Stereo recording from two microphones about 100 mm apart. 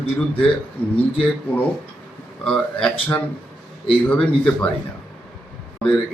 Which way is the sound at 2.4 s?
10° left (ahead or behind).